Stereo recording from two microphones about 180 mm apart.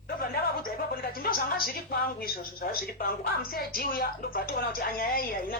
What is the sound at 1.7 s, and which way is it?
A woman's voice, 55° left (ahead or behind).